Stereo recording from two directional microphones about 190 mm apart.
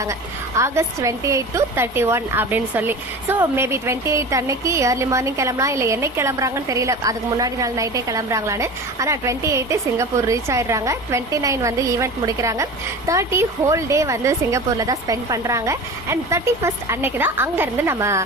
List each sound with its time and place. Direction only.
0.5 s a woman's voice: 15° right (ahead or behind)